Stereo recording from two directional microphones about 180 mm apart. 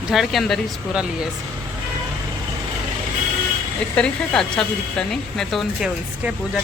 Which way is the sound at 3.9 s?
5° left (ahead or behind).